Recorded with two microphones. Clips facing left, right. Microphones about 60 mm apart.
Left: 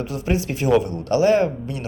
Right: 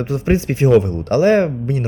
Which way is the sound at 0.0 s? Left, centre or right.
Right.